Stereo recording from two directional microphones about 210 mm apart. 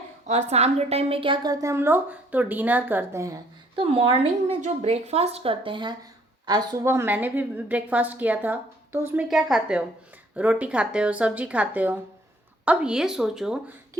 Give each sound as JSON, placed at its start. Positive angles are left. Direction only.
{"t": 0.3, "sound": "a woman's voice", "side_deg": -35}
{"t": 3.8, "sound": "a woman's voice", "side_deg": -25}